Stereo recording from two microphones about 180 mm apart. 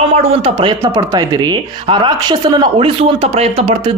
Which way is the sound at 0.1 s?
35° right (ahead or behind).